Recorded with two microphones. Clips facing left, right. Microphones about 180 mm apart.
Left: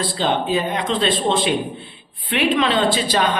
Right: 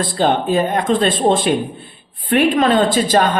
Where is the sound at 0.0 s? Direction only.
50° right (ahead or behind).